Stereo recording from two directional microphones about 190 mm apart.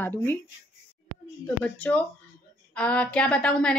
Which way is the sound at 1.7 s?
5° left (ahead or behind).